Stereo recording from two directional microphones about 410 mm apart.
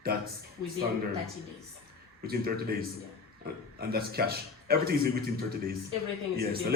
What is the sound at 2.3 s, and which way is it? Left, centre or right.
Speech, right.